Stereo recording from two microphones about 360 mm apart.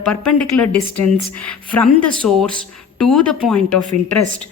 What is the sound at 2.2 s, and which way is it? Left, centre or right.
A woman's voice, centre.